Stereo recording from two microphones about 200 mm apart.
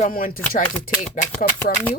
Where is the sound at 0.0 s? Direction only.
45° left (ahead or behind).